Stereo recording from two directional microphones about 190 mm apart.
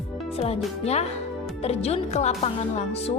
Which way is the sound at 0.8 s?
35° left (ahead or behind).